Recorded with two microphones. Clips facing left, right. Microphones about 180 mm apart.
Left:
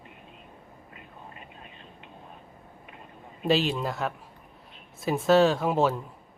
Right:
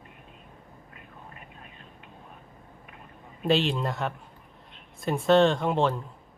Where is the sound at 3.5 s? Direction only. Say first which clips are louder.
Even; centre (ahead or behind).